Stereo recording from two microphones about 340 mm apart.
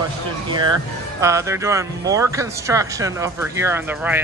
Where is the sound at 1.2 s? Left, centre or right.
Centre.